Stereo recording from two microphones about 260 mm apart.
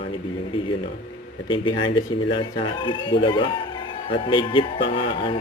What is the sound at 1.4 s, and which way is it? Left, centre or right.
Speech, centre.